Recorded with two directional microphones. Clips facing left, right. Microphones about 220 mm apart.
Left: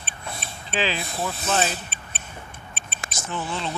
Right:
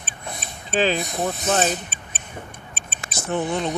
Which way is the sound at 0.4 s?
45° right (ahead or behind).